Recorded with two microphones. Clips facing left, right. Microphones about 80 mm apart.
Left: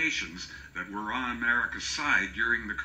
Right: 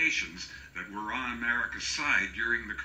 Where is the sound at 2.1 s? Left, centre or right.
Centre.